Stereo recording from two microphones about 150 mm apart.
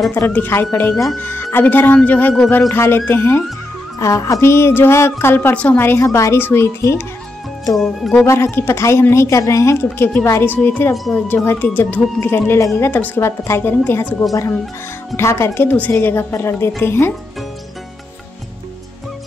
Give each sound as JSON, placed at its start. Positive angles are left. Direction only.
{"t": 0.1, "sound": "a woman's voice", "side_deg": 15}
{"t": 7.7, "sound": "music", "side_deg": 0}
{"t": 8.3, "sound": "a woman's voice", "side_deg": 15}
{"t": 15.1, "sound": "a woman's voice", "side_deg": 15}